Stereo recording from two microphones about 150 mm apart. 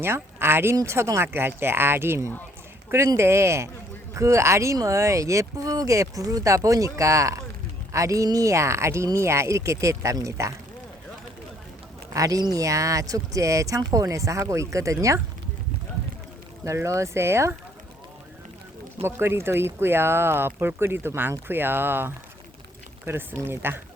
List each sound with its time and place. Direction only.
0.0 s speech: 15° right (ahead or behind)
12.1 s speech: 25° right (ahead or behind)
16.6 s speech: 20° right (ahead or behind)
19.0 s speech: 15° right (ahead or behind)